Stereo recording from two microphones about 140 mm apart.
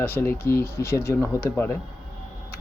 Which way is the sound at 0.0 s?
15° left (ahead or behind).